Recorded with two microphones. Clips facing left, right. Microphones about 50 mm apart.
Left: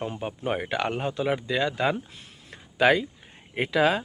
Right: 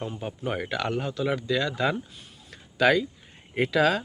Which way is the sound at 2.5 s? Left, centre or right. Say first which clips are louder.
Left 1 dB; left.